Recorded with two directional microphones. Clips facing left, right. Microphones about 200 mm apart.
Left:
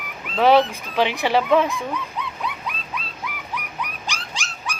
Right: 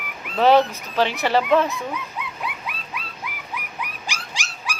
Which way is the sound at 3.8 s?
10° right (ahead or behind).